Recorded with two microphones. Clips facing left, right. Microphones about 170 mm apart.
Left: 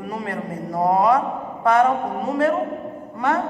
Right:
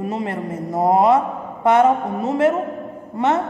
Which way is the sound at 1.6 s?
25° right (ahead or behind).